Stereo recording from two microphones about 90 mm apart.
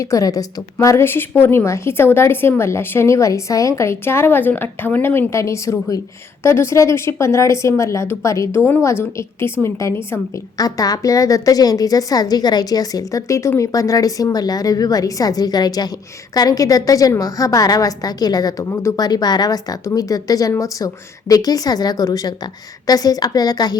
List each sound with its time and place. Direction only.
0.0 s a woman's voice: 40° left (ahead or behind)
10.6 s a woman's voice: 45° left (ahead or behind)
18.7 s a woman's voice: 30° left (ahead or behind)
18.9 s a woman's voice: 45° left (ahead or behind)